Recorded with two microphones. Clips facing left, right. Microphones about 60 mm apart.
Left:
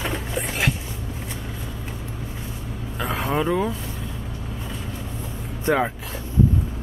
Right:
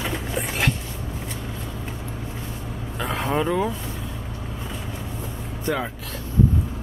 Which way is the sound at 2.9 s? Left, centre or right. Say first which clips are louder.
Even; centre.